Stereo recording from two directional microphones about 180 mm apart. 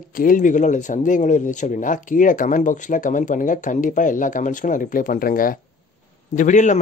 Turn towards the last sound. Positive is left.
turn(degrees=40)  # may be behind; listen again after turning